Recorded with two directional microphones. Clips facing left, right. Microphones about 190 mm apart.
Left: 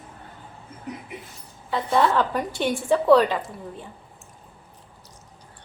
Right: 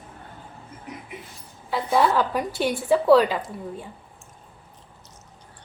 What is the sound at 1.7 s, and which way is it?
A woman's voice, 5° right (ahead or behind).